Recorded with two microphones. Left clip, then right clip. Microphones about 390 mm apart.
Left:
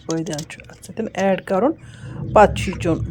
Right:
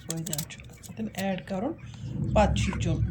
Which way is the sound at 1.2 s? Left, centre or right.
Centre.